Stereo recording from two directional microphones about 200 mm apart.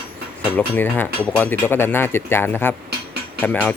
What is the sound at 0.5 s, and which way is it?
Speech, 10° left (ahead or behind).